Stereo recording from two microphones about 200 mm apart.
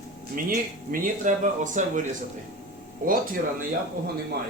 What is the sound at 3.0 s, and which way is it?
Speech, 40° right (ahead or behind).